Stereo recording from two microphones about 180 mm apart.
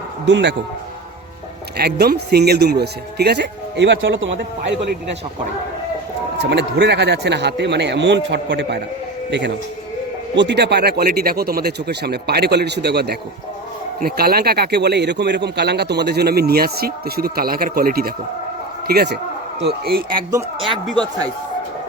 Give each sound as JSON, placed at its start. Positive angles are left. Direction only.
{"t": 0.3, "sound": "speech", "side_deg": -80}
{"t": 1.7, "sound": "speech", "side_deg": -60}
{"t": 6.4, "sound": "speech", "side_deg": -75}
{"t": 10.3, "sound": "a man's voice", "side_deg": -75}
{"t": 20.9, "sound": "speech", "side_deg": -25}